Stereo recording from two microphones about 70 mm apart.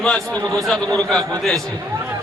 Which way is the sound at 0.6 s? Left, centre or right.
Centre.